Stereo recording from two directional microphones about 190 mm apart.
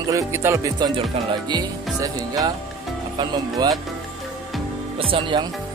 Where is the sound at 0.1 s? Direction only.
15° right (ahead or behind).